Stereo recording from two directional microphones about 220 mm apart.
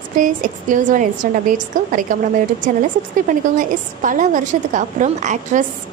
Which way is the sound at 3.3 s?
35° right (ahead or behind).